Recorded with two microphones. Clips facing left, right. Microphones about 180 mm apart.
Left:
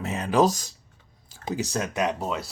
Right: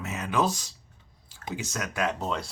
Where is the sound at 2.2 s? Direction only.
5° left (ahead or behind).